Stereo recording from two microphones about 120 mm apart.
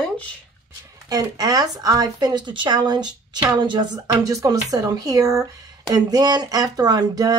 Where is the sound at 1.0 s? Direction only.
30° right (ahead or behind).